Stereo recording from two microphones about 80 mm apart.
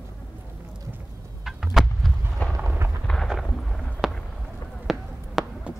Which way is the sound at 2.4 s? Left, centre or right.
Centre.